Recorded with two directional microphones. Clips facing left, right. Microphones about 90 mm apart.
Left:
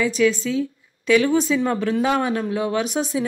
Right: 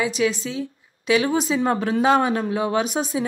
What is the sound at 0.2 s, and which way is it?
A woman's voice, 30° right (ahead or behind).